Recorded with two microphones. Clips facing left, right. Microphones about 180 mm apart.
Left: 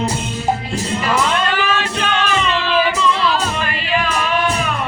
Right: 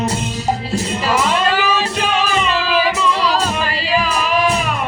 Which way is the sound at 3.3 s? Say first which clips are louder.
Right 1 dB; 35° right (ahead or behind).